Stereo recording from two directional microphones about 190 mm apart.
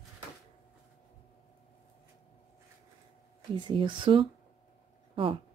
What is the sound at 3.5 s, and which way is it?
Speech, 25° right (ahead or behind).